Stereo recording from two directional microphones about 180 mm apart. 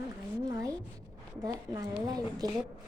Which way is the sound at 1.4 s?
20° right (ahead or behind).